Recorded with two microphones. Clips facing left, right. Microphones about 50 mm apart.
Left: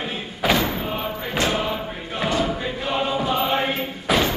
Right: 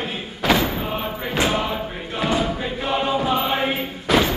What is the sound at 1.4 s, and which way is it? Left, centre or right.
Choir, centre.